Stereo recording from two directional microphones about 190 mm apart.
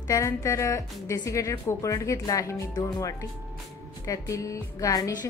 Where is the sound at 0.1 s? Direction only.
15° left (ahead or behind).